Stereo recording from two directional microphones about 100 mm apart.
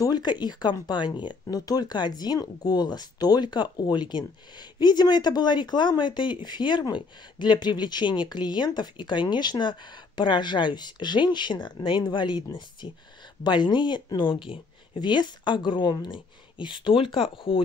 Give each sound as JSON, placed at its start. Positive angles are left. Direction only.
{"t": 0.0, "sound": "speech", "side_deg": 45}